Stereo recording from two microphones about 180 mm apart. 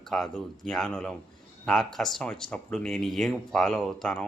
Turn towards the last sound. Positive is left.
turn(degrees=5)  # may be behind; listen again after turning